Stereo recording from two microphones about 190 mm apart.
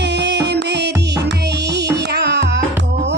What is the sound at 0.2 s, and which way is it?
Music, 65° right (ahead or behind).